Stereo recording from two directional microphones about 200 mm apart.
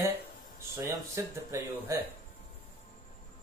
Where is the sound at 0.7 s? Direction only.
15° right (ahead or behind).